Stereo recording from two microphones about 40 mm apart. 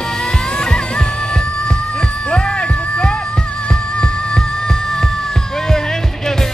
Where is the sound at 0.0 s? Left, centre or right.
Centre.